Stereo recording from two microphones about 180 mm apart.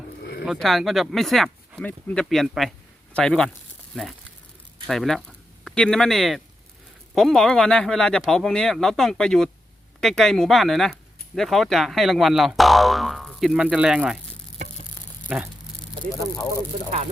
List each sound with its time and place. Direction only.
0.2 s a sound: 60° left (ahead or behind)
0.4 s speech: centre (ahead or behind)
4.9 s speech: centre (ahead or behind)
15.3 s speech: 5° right (ahead or behind)